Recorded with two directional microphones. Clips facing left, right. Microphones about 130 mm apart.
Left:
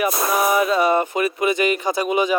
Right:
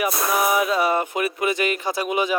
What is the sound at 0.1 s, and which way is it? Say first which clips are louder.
Speech: left 2 dB; centre (ahead or behind).